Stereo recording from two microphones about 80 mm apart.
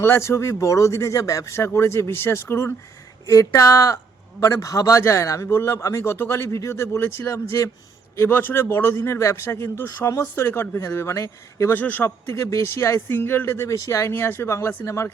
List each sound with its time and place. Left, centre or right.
0.0 s a man's voice: left
3.2 s a man's voice: left
11.7 s a man's voice: left
12.3 s a man's voice: left